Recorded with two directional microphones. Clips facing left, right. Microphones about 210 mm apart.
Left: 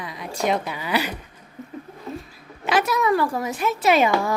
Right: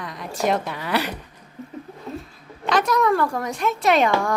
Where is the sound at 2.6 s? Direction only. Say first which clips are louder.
Right 1 dB; 5° left (ahead or behind).